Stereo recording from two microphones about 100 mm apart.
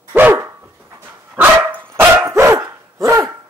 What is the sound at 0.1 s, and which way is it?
Dog, 20° right (ahead or behind).